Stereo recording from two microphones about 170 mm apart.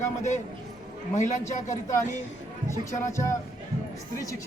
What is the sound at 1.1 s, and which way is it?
Speech, 45° left (ahead or behind).